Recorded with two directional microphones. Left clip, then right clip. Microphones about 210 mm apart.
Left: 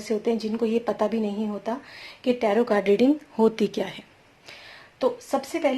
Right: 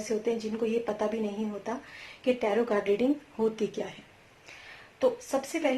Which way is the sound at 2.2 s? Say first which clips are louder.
Left 5 dB; 40° left (ahead or behind).